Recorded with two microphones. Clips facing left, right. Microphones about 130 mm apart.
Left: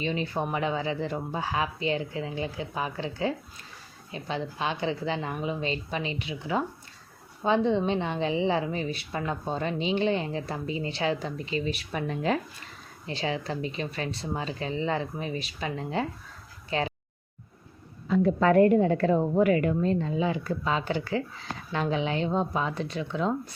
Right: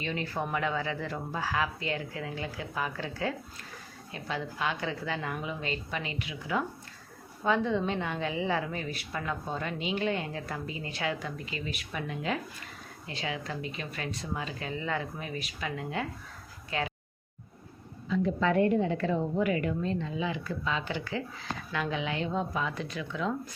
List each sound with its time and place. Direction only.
0.0 s a woman's voice: 20° left (ahead or behind)
18.1 s a woman's voice: 45° left (ahead or behind)